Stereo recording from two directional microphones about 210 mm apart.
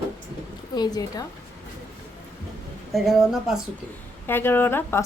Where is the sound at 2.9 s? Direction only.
Centre (ahead or behind).